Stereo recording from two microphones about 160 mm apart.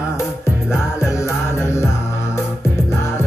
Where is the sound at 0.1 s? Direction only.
15° left (ahead or behind).